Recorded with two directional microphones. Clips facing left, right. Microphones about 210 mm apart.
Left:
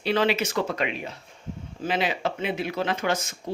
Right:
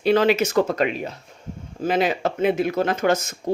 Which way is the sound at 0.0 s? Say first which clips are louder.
Right 6 dB; 45° right (ahead or behind).